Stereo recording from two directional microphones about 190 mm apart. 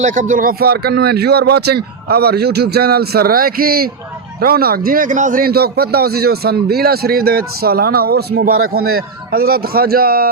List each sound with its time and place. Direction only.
0.0 s a man's voice: 40° right (ahead or behind); by 8.7 s 75° right (ahead or behind)
9.3 s a man's voice: 50° right (ahead or behind)